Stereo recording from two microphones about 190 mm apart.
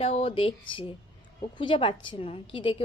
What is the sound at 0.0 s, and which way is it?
A woman's voice, 30° left (ahead or behind).